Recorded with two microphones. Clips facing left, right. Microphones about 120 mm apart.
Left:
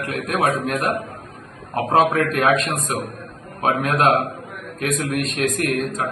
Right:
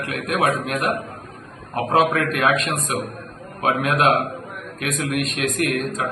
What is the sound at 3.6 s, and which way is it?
A man's voice, 35° left (ahead or behind).